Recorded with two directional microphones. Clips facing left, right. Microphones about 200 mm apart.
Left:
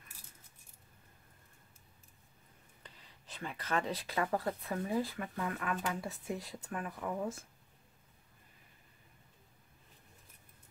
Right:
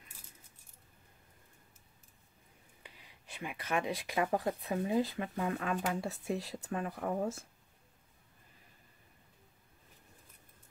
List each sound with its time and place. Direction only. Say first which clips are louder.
2.8 s speech: right 1 dB; 10° right (ahead or behind); by 7.3 s 30° right (ahead or behind)